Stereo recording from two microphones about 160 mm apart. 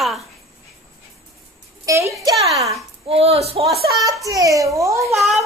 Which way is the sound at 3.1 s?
40° right (ahead or behind).